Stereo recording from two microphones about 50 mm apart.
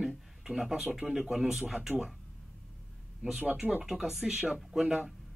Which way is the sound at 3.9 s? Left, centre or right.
Centre.